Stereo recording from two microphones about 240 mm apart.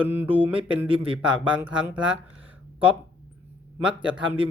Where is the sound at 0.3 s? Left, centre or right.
Right.